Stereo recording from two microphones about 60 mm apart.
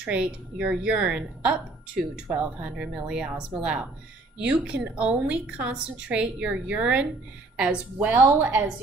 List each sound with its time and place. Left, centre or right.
0.0 s a woman's voice: centre
8.0 s a woman's voice: right